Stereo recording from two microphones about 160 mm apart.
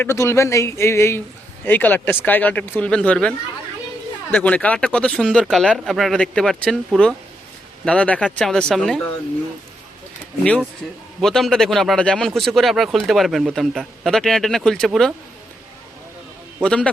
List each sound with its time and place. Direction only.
0.0 s speech: 15° left (ahead or behind)
11.2 s speech: centre (ahead or behind)
16.6 s speech: 5° left (ahead or behind)